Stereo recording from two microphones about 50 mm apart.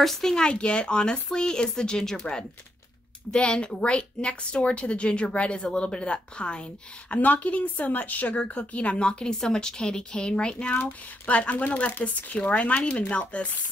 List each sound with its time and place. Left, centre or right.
0.0 s speech: centre
0.5 s speech: left
3.3 s a woman's voice: left
7.2 s a woman's voice: left